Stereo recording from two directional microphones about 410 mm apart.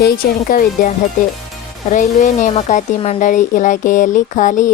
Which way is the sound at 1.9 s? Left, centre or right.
Centre.